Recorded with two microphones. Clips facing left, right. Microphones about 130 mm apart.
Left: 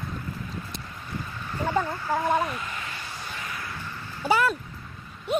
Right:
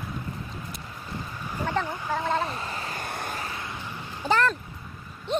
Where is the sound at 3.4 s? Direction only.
25° right (ahead or behind).